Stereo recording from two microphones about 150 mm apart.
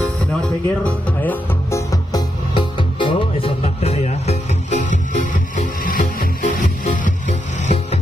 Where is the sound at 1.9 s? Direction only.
25° left (ahead or behind); by 7.7 s 50° left (ahead or behind).